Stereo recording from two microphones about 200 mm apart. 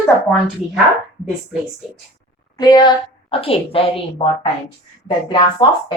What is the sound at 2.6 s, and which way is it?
A woman's voice, 20° left (ahead or behind).